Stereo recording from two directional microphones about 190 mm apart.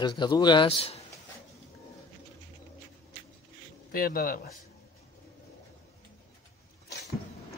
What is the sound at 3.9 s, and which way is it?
Speech, 50° left (ahead or behind).